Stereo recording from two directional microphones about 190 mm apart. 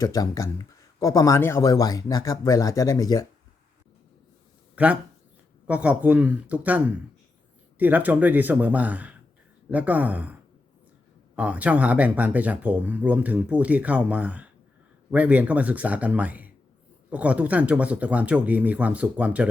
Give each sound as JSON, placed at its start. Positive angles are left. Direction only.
{"t": 0.0, "sound": "speech", "side_deg": 20}
{"t": 4.7, "sound": "a sound", "side_deg": -5}
{"t": 5.6, "sound": "speech", "side_deg": -5}
{"t": 11.3, "sound": "speech", "side_deg": -5}